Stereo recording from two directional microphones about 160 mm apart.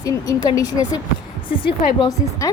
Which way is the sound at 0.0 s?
20° left (ahead or behind).